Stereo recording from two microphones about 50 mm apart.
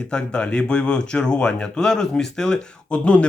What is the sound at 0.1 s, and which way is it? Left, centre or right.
Speech, centre.